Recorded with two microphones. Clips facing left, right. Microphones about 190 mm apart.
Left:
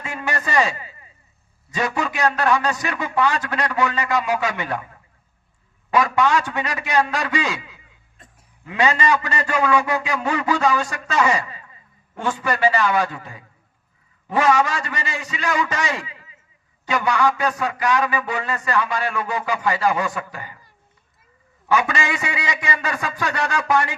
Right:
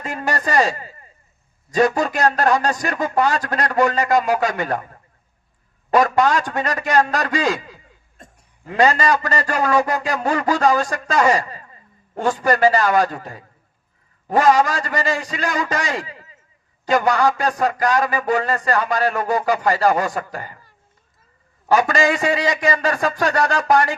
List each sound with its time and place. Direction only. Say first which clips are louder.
0.0 s a man's voice: right 3 dB; 40° right (ahead or behind)
5.9 s a man's voice: right 2 dB; 40° right (ahead or behind)
21.7 s a man's voice: right 4 dB; 40° right (ahead or behind)